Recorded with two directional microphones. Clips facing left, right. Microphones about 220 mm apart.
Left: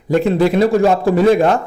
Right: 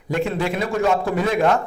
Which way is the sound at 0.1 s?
35° left (ahead or behind).